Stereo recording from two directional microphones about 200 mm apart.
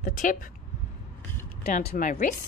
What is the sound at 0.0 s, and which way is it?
Speech, 40° left (ahead or behind).